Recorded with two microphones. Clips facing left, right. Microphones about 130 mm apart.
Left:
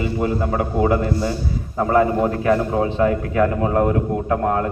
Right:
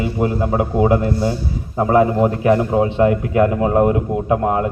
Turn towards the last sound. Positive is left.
turn(degrees=-10)  # may be behind; listen again after turning